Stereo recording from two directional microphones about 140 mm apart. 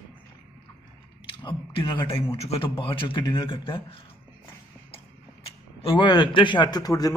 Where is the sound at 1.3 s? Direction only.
35° left (ahead or behind).